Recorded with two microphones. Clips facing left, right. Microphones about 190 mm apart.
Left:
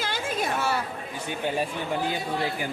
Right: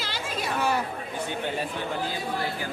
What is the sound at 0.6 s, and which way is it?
Speech, 15° right (ahead or behind).